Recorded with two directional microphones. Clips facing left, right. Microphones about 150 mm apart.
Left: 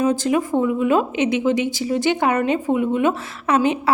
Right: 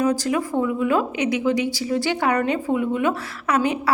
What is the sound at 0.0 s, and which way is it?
A woman's voice, 25° left (ahead or behind).